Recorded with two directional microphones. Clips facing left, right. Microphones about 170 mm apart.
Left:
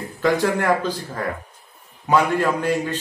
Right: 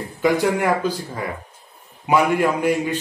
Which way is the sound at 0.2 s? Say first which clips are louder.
Right 1 dB; 15° right (ahead or behind).